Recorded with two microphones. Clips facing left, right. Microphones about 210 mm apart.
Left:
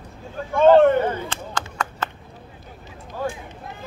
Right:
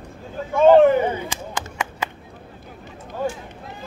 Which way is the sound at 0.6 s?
5° right (ahead or behind).